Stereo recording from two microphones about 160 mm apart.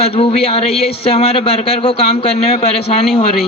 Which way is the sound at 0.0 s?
35° left (ahead or behind).